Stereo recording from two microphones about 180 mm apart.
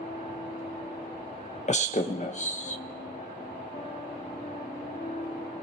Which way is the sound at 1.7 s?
40° left (ahead or behind).